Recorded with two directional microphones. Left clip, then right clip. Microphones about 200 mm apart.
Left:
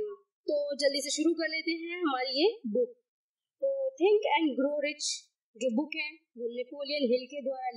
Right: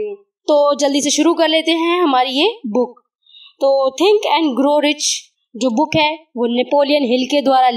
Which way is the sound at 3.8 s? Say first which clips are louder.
Right 13 dB; 40° right (ahead or behind).